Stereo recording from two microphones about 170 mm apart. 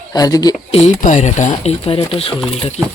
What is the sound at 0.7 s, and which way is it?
Speech, 35° left (ahead or behind).